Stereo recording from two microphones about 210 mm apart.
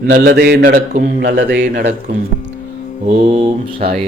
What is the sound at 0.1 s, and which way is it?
Speech, 50° right (ahead or behind).